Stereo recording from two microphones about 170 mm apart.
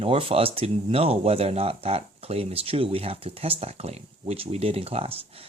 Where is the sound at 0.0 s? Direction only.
30° right (ahead or behind).